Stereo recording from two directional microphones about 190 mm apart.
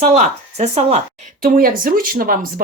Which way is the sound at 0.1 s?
35° right (ahead or behind).